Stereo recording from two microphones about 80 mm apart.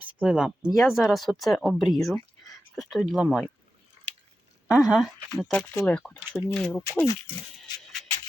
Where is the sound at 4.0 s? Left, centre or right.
Right.